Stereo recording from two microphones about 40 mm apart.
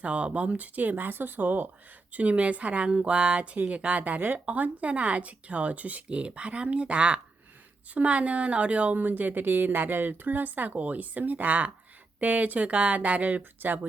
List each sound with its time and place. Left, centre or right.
0.0 s speech: right
2.1 s speech: right
9.0 s speech: right